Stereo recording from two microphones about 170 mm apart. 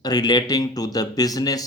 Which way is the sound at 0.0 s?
25° left (ahead or behind).